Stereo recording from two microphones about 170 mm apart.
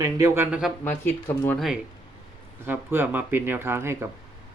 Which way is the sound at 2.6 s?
10° right (ahead or behind).